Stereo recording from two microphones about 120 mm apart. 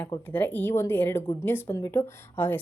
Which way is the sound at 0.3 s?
15° left (ahead or behind).